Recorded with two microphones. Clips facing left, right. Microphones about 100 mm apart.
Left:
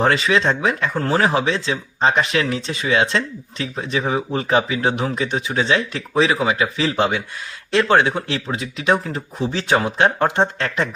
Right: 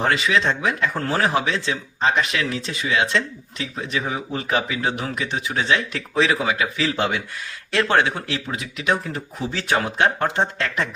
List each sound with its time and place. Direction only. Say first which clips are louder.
0.0 s speech: left 3 dB; 30° left (ahead or behind)